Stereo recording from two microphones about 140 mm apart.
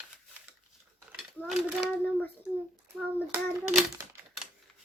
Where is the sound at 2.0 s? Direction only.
10° left (ahead or behind).